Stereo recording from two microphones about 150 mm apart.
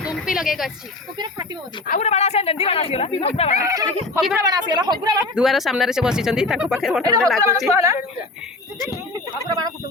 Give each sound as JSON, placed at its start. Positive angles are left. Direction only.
{"t": 0.1, "sound": "a sound", "side_deg": -5}
{"t": 1.9, "sound": "speech", "side_deg": 50}
{"t": 3.6, "sound": "speech", "side_deg": -20}
{"t": 5.3, "sound": "speech", "side_deg": 0}
{"t": 7.7, "sound": "speech", "side_deg": -20}